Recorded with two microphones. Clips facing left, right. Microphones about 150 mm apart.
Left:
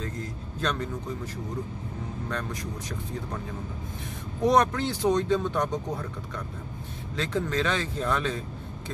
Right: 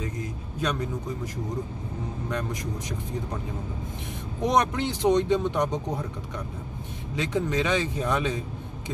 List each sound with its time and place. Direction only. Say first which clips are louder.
0.0 s speech: right 2 dB; 15° right (ahead or behind)
4.4 s speech: left 1 dB; 20° right (ahead or behind)